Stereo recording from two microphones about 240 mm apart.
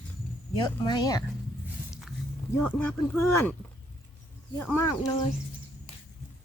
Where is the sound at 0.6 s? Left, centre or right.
Centre.